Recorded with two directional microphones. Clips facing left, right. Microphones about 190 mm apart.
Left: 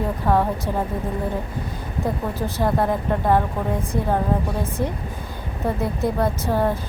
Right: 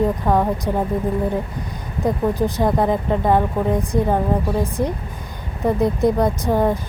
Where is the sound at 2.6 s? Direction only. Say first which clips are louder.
Left 1 dB; 15° right (ahead or behind).